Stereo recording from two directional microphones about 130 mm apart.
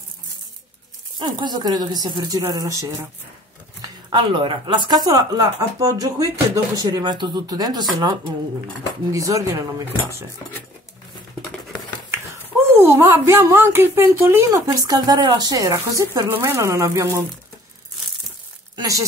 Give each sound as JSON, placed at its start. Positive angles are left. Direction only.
{"t": 1.2, "sound": "speech", "side_deg": -35}
{"t": 3.8, "sound": "speech", "side_deg": -35}
{"t": 9.1, "sound": "speech", "side_deg": -25}
{"t": 12.7, "sound": "speech", "side_deg": -20}
{"t": 18.8, "sound": "speech", "side_deg": -25}